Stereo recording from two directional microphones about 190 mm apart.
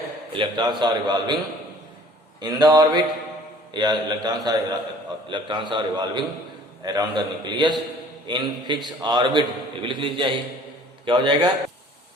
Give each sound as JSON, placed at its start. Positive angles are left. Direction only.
{"t": 0.3, "sound": "a man's voice", "side_deg": -25}
{"t": 2.4, "sound": "a man's voice", "side_deg": -20}